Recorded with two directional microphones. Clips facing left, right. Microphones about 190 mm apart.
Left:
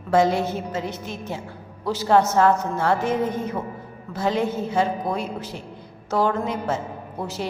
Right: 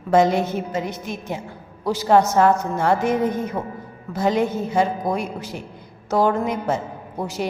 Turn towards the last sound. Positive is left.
turn(degrees=-15)  # may be behind; listen again after turning